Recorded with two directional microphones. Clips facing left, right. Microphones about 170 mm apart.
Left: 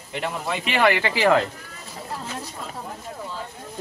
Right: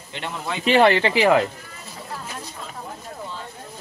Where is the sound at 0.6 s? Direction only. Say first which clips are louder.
Right 5 dB; 30° right (ahead or behind).